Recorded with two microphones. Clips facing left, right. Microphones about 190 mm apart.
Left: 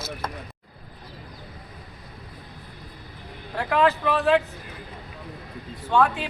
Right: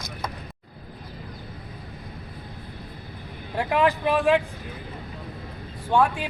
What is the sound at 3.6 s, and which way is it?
Speech, 15° right (ahead or behind).